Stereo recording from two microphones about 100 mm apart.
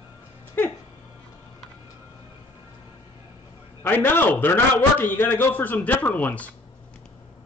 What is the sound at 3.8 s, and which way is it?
A man's voice, 20° left (ahead or behind).